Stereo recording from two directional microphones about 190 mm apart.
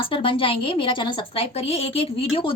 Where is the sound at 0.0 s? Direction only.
25° left (ahead or behind).